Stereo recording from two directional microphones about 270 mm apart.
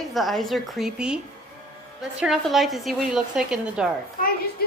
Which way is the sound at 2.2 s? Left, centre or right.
Centre.